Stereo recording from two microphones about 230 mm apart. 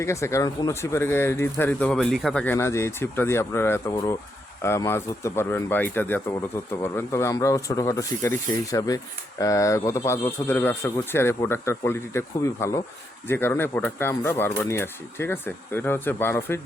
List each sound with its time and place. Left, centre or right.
0.0 s speech: centre